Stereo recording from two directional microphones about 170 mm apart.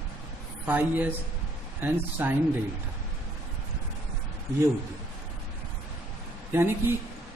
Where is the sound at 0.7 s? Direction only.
10° right (ahead or behind).